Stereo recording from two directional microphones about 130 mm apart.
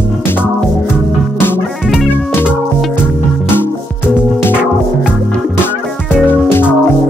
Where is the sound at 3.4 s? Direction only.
15° left (ahead or behind).